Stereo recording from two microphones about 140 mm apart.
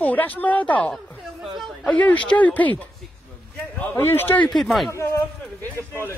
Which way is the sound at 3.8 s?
15° left (ahead or behind).